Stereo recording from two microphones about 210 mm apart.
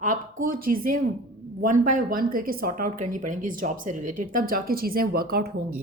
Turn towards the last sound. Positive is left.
turn(degrees=-45)  # may be behind; listen again after turning